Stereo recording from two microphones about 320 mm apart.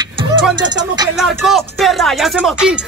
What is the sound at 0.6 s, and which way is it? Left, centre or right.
Music, centre.